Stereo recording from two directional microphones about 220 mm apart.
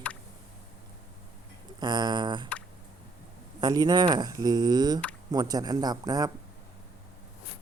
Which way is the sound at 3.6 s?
20° right (ahead or behind).